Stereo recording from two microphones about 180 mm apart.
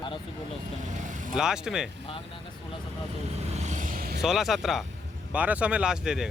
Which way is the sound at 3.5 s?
40° right (ahead or behind).